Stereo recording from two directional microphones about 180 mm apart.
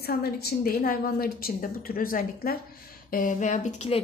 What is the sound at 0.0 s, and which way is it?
A woman's voice, 60° left (ahead or behind).